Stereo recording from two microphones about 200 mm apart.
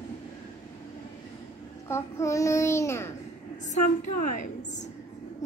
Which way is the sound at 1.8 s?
15° left (ahead or behind).